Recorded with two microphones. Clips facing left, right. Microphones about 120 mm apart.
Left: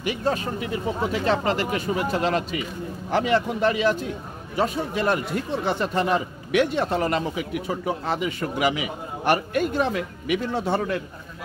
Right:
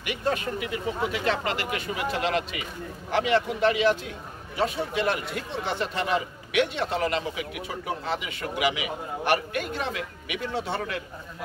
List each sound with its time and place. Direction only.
0.0 s speech: 35° left (ahead or behind)